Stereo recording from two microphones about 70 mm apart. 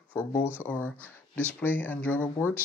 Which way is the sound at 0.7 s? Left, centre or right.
Left.